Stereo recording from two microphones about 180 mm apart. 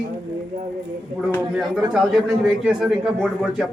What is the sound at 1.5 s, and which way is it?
Speech, centre (ahead or behind).